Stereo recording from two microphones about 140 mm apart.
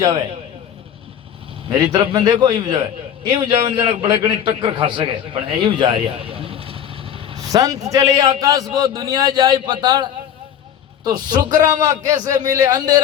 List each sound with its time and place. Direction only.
1.7 s a man's voice: 30° right (ahead or behind)
7.3 s vehicle: 25° right (ahead or behind)
7.9 s a man's voice: 25° right (ahead or behind)